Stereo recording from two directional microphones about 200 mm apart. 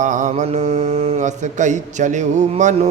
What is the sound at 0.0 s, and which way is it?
Mantra, 40° right (ahead or behind).